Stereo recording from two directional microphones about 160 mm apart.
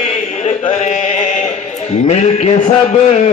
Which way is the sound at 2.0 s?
40° left (ahead or behind).